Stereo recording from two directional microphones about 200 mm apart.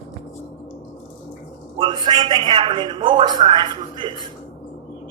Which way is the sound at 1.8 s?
20° right (ahead or behind).